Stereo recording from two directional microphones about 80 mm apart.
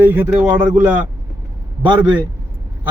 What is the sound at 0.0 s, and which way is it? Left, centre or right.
Speech, right.